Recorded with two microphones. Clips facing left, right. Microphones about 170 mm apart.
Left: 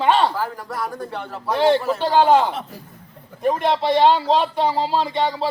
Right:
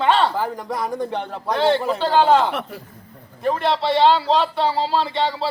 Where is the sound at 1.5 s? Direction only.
10° left (ahead or behind).